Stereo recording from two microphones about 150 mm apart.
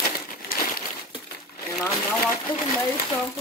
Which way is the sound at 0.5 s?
75° left (ahead or behind).